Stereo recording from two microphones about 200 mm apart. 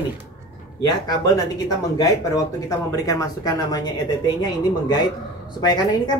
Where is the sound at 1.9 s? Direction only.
20° left (ahead or behind).